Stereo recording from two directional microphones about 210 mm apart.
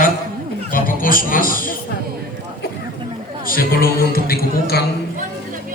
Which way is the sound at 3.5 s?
45° left (ahead or behind).